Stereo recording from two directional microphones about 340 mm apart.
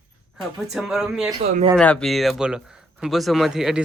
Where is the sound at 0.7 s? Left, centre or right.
Centre.